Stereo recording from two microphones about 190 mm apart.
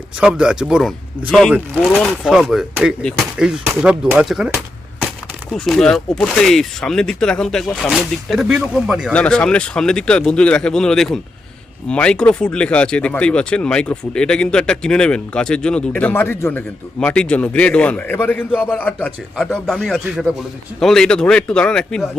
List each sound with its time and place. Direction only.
0.2 s speech: 5° right (ahead or behind)